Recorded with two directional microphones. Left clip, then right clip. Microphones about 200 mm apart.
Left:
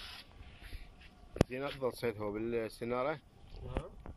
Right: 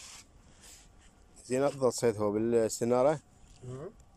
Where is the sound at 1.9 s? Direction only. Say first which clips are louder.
Right 8 dB; 30° right (ahead or behind).